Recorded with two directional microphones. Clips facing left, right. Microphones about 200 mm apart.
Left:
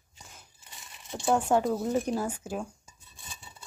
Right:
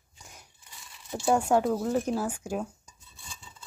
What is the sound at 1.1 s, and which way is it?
Speech, 5° right (ahead or behind).